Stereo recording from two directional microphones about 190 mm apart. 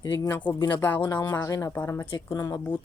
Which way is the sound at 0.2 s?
10° left (ahead or behind).